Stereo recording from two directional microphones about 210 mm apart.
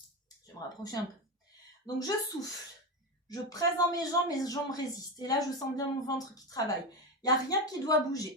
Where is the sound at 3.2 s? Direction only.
15° left (ahead or behind).